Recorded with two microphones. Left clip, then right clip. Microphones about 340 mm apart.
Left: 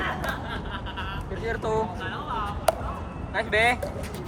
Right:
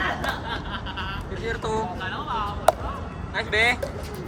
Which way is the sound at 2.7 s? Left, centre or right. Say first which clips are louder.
Right 4 dB; centre.